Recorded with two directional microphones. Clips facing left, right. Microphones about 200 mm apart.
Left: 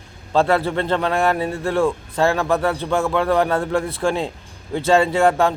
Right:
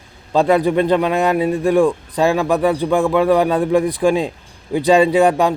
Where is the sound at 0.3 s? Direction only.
15° right (ahead or behind).